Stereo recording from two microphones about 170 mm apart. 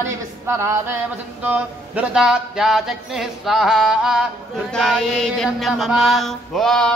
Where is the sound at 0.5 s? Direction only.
15° right (ahead or behind).